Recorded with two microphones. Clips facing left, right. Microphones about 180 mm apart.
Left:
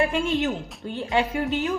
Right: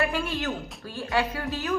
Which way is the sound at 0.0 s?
20° left (ahead or behind).